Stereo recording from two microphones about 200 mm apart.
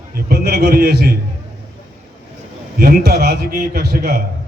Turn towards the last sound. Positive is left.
turn(degrees=-50)  # may be behind; listen again after turning